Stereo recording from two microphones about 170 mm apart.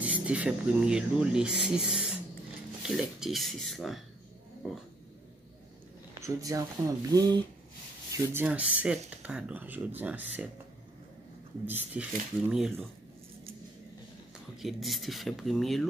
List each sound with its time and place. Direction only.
0.0 s speech: 5° right (ahead or behind)
6.1 s speech: 20° right (ahead or behind)
11.6 s speech: 10° right (ahead or behind)
14.6 s speech: centre (ahead or behind)